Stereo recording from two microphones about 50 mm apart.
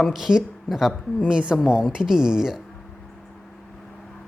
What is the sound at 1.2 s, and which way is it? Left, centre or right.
Speech, centre.